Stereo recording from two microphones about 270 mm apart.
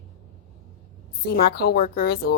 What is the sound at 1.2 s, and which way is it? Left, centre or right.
A woman's voice, left.